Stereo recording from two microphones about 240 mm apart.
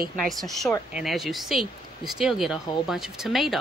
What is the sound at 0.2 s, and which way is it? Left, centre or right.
Speech, centre.